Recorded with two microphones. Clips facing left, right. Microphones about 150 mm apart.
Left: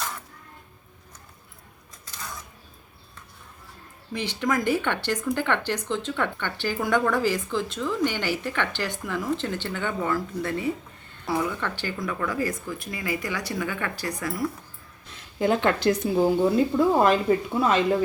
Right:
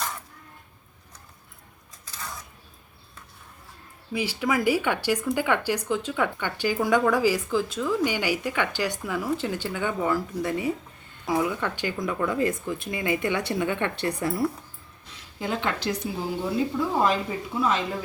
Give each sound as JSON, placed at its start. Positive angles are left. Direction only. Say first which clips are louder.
{"t": 4.1, "sound": "speech", "louder": "even", "side_deg": -5}
{"t": 15.1, "sound": "speech", "louder": "left 7 dB", "side_deg": 55}